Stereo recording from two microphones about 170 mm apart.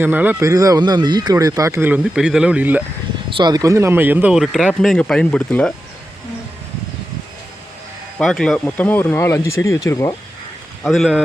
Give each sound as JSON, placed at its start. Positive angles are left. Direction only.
{"t": 0.0, "sound": "speech", "side_deg": -10}
{"t": 3.2, "sound": "speech", "side_deg": -25}
{"t": 8.2, "sound": "speech", "side_deg": 0}
{"t": 10.8, "sound": "speech", "side_deg": 0}